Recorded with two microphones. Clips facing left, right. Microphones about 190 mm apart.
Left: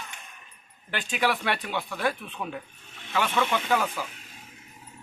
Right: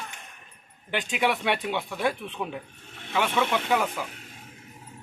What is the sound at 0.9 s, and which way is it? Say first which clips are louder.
A man's voice: right 1 dB; 20° right (ahead or behind).